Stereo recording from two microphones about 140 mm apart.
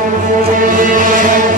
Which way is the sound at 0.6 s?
75° right (ahead or behind).